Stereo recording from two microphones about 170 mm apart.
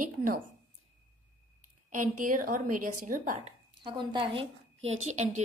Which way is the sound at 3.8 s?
30° right (ahead or behind).